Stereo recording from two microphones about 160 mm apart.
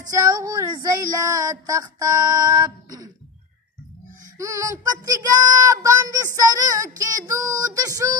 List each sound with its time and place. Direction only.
0.1 s speech: 20° right (ahead or behind)
4.4 s speech: 20° right (ahead or behind)